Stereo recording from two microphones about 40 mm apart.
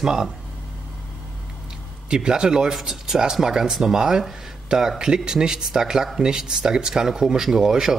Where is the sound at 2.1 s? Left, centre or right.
Centre.